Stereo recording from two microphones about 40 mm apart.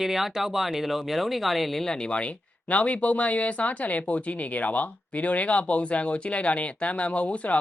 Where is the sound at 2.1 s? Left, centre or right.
Left.